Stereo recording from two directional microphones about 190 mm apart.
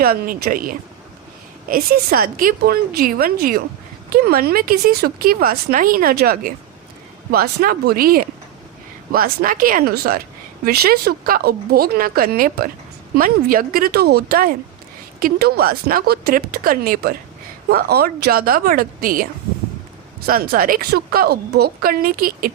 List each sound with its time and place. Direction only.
0.0 s speech: 50° right (ahead or behind)